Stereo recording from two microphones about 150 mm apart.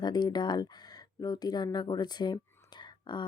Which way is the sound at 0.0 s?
30° left (ahead or behind).